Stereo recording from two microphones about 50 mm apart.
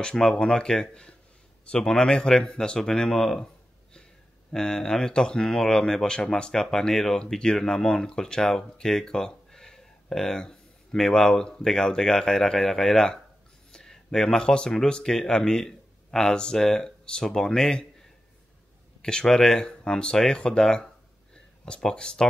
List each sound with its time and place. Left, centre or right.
0.0 s speech: centre
4.5 s speech: centre
13.7 s a sound: centre
14.9 s speech: centre
19.0 s speech: centre